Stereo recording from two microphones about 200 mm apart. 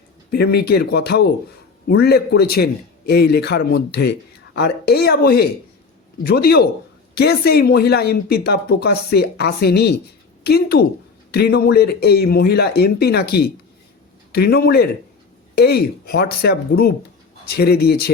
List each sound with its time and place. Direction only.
0.3 s speech: 55° left (ahead or behind)